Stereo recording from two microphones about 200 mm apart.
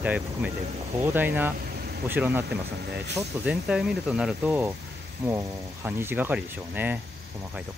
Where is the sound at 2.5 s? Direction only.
55° right (ahead or behind).